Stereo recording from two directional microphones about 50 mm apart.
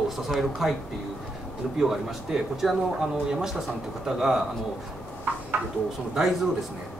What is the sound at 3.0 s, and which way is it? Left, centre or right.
Speech, centre.